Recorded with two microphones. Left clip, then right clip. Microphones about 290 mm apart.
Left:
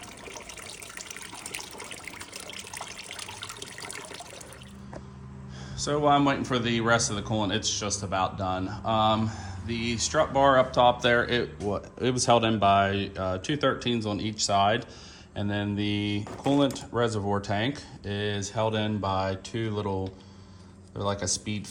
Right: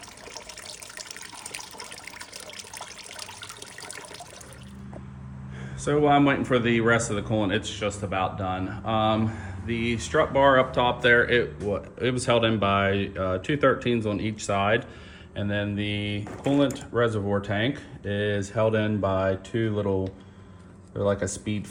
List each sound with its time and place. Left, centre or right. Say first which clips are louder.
2.6 s water: left 1 dB; centre
5.9 s speech: right 2 dB; centre
7.6 s speech: even; centre
8.1 s speech: left 2 dB; centre
16.2 s speech: right 2 dB; left
16.7 s speech: right 3 dB; centre